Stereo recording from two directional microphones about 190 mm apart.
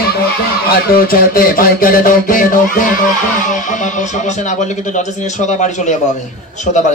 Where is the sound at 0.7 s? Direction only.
50° left (ahead or behind).